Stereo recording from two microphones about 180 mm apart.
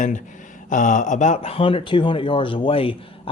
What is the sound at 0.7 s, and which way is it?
Speech, 45° left (ahead or behind).